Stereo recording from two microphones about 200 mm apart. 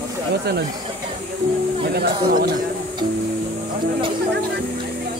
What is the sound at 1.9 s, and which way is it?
Speech, 50° right (ahead or behind).